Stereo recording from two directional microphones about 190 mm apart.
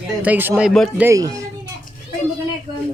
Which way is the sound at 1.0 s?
15° right (ahead or behind).